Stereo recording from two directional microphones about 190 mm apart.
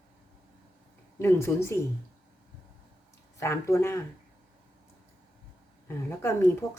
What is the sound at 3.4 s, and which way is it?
Speech, 15° left (ahead or behind).